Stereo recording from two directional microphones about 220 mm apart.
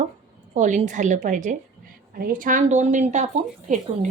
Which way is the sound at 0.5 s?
35° right (ahead or behind).